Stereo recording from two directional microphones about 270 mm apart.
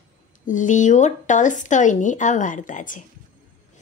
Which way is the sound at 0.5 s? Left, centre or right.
Left.